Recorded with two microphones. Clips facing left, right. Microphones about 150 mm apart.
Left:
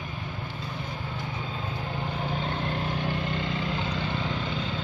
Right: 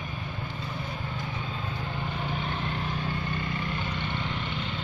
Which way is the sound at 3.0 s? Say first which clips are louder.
Left 3 dB; 80° left.